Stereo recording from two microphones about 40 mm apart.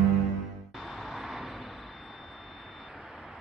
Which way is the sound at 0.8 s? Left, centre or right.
Centre.